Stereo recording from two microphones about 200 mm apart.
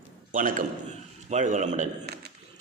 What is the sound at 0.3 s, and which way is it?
A man's voice, 40° right (ahead or behind).